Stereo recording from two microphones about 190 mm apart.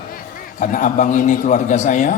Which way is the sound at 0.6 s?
40° left (ahead or behind).